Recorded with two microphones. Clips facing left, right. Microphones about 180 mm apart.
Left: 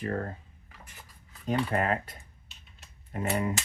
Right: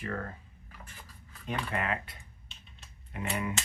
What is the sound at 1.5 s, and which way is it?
Speech, 40° left (ahead or behind).